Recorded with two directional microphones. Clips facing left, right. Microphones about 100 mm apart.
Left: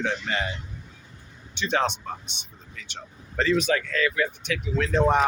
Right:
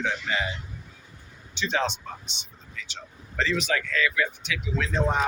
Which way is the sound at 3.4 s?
45° left (ahead or behind).